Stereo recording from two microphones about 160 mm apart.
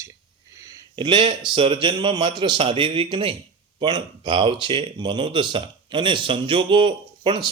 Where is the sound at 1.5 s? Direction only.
35° right (ahead or behind).